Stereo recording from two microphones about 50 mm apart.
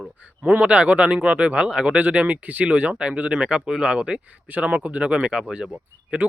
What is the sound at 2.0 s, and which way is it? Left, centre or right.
Speech, right.